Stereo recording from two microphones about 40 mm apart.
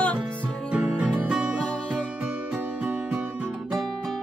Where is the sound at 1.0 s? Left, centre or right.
Right.